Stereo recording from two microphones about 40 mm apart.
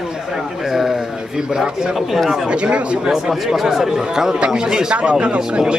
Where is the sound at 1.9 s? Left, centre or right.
Centre.